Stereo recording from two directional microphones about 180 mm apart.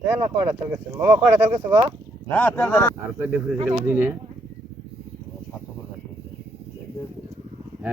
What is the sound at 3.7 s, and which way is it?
Speech, 10° right (ahead or behind).